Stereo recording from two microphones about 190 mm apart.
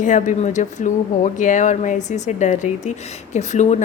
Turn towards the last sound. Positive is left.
turn(degrees=40)  # may be behind; listen again after turning